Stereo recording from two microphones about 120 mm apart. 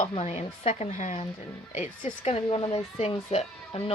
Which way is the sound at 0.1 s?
60° left (ahead or behind).